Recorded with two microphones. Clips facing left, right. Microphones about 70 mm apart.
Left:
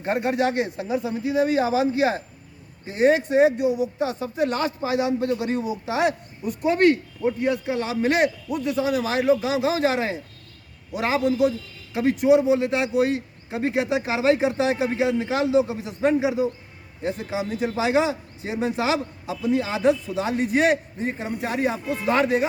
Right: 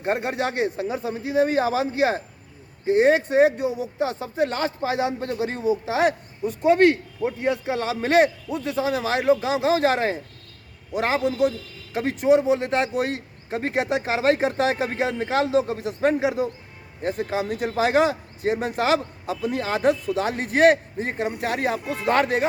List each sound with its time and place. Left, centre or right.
0.0 s speech: right
0.9 s a man's voice: right